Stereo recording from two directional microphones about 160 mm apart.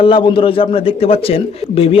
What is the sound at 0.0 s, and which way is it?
A man's voice, 30° left (ahead or behind).